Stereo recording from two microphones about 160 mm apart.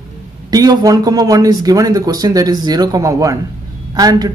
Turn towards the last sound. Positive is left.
turn(degrees=-25)  # may be behind; listen again after turning